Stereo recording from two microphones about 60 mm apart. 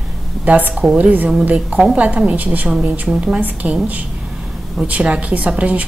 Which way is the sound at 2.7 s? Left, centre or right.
Centre.